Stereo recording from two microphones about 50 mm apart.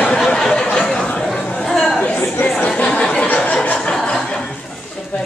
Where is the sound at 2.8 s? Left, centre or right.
Left.